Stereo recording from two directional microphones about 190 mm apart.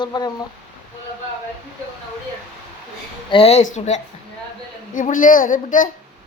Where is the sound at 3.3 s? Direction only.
30° left (ahead or behind).